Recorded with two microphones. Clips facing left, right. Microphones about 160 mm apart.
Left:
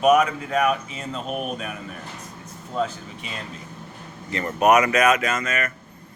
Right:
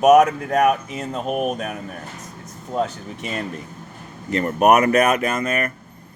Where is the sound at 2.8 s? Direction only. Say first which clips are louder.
Right 2 dB; 45° right (ahead or behind).